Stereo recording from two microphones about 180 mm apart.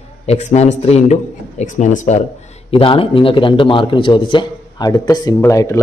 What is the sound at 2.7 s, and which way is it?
A man's voice, 30° left (ahead or behind).